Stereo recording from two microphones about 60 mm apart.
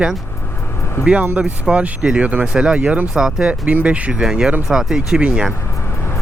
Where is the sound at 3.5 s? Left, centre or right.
Right.